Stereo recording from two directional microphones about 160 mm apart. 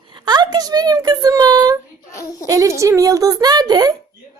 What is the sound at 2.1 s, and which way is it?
Speech, 20° left (ahead or behind).